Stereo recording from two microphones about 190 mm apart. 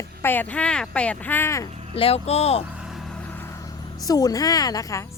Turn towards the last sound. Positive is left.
turn(degrees=15)  # may be behind; listen again after turning